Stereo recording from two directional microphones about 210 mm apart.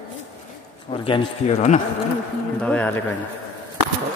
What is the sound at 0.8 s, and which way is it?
Speech, 25° left (ahead or behind).